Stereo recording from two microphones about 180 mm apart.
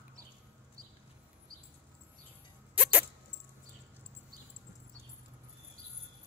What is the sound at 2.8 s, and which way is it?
Dog, 10° right (ahead or behind).